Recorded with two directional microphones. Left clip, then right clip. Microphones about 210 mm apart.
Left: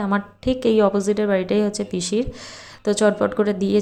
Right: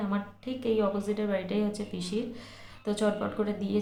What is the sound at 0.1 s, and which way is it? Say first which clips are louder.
Speech: left 13 dB; 40° left (ahead or behind).